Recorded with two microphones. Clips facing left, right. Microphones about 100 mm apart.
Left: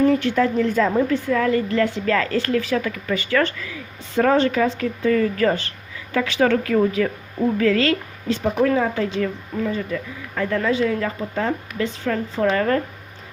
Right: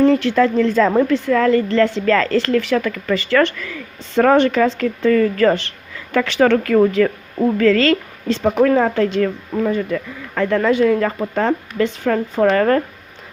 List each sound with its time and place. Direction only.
0.0 s a woman's voice: 90° right
1.7 s a woman's voice: 85° right
7.6 s a woman's voice: 90° right; by 9.3 s 65° right (ahead or behind)
9.6 s speech: 55° right (ahead or behind)
12.0 s a woman's voice: 50° right (ahead or behind)